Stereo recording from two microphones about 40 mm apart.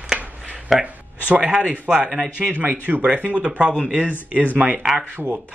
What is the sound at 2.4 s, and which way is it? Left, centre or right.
Speech, right.